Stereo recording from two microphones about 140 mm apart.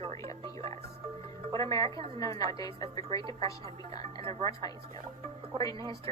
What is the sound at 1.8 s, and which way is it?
Speech, 45° right (ahead or behind).